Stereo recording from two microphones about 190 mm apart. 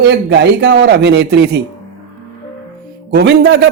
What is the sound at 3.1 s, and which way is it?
Speech, 60° right (ahead or behind).